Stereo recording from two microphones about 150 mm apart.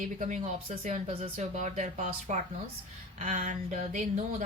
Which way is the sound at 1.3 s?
55° right (ahead or behind).